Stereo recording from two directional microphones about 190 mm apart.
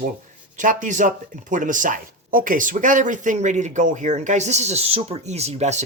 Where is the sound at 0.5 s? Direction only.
40° right (ahead or behind).